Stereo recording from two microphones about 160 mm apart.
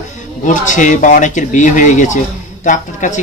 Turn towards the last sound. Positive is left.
turn(degrees=55)  # may be behind; listen again after turning